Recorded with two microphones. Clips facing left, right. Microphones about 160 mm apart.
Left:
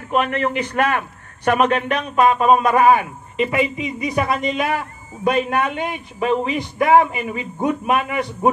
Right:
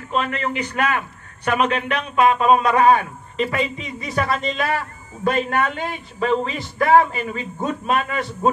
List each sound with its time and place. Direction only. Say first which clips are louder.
0.1 s a man's voice: left 4 dB; 60° left (ahead or behind)
2.9 s speech: left 1 dB; 20° left (ahead or behind)